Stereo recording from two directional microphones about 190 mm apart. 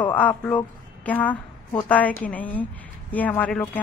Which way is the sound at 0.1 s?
10° left (ahead or behind).